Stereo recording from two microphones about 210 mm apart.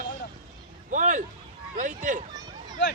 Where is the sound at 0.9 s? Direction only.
40° right (ahead or behind).